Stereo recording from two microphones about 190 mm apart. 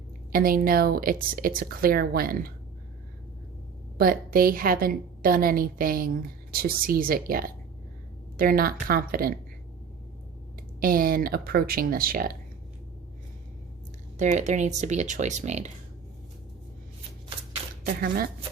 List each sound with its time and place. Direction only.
0.3 s speech: 50° right (ahead or behind)
3.9 s speech: 50° right (ahead or behind)
10.8 s speech: 50° right (ahead or behind)
14.2 s speech: 40° right (ahead or behind)
18.0 s speech: 50° right (ahead or behind)